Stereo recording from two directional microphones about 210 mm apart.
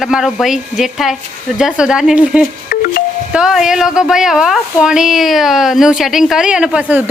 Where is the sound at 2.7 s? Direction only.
45° left (ahead or behind).